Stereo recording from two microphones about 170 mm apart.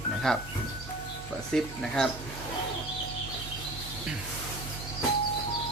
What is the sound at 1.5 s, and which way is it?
Speech, centre (ahead or behind).